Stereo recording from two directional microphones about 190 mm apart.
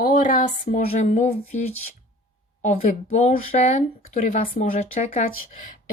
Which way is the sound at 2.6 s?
40° left (ahead or behind).